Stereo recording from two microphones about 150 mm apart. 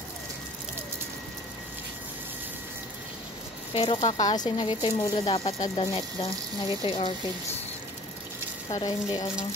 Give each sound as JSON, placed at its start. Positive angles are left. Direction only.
{"t": 3.7, "sound": "speech", "side_deg": 40}
{"t": 4.2, "sound": "speech", "side_deg": 25}
{"t": 8.6, "sound": "speech", "side_deg": 25}